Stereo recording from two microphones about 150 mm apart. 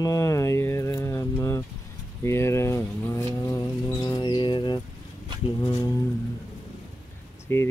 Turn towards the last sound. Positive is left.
turn(degrees=15)  # may be behind; listen again after turning